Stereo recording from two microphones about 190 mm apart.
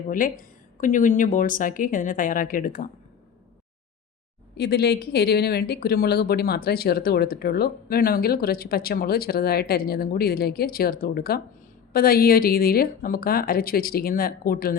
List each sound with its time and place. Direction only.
0.8 s speech: 45° left (ahead or behind)
4.5 s speech: 60° left (ahead or behind)